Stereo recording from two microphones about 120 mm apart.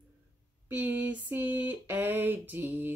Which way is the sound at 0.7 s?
15° right (ahead or behind).